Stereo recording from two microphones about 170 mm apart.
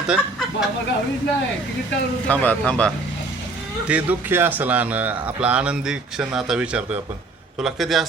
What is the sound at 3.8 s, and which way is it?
Speech, 10° right (ahead or behind).